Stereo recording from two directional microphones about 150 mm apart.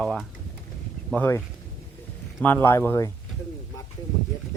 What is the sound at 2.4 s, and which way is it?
Speech, 15° left (ahead or behind).